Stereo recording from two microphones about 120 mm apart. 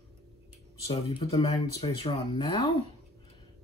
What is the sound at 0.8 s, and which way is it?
Speech, 50° left (ahead or behind).